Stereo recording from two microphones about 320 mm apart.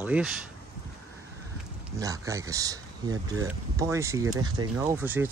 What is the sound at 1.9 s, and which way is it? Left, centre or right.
Speech, centre.